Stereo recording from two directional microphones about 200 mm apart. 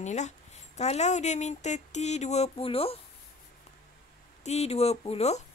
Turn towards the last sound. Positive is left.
turn(degrees=30)  # may be behind; listen again after turning